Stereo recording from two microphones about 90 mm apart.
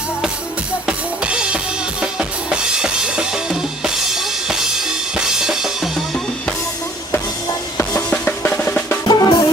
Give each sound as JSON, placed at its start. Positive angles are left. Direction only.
{"t": 0.9, "sound": "drum kit", "side_deg": -10}
{"t": 8.1, "sound": "drum", "side_deg": 15}
{"t": 9.0, "sound": "drum", "side_deg": 50}